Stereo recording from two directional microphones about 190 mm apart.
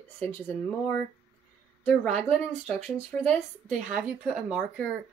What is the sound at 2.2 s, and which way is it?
Speech, 5° right (ahead or behind).